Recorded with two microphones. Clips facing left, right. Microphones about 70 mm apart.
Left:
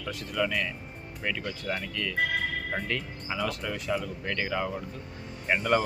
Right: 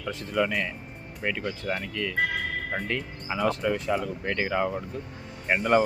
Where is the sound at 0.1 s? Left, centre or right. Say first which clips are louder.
Right 3 dB; right.